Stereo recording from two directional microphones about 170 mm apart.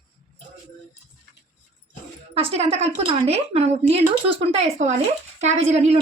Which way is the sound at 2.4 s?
35° right (ahead or behind).